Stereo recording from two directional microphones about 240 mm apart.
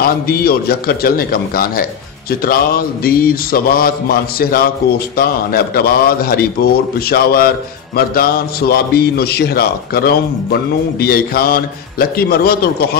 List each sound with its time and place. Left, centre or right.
0.0 s a man's voice: left